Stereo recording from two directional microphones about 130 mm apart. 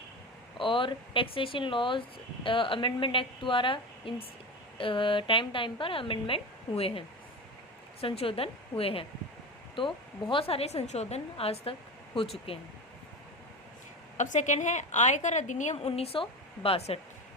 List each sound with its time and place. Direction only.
0.6 s speech: 40° left (ahead or behind)
8.0 s a woman's voice: 45° left (ahead or behind)
14.2 s a woman's voice: 70° left (ahead or behind); by 17.0 s 50° left (ahead or behind)